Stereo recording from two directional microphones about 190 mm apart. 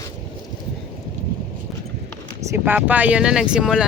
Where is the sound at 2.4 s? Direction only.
10° right (ahead or behind).